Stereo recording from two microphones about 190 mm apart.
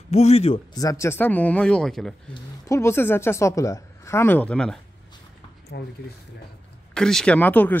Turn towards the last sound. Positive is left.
turn(degrees=10)  # may be behind; listen again after turning